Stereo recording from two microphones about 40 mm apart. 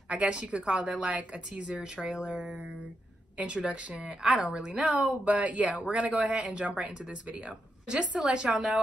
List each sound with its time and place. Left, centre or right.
0.1 s speech: right
2.0 s speech: centre
3.3 s speech: right